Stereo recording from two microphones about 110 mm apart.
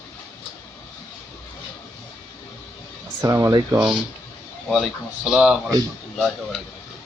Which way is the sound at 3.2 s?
25° right (ahead or behind).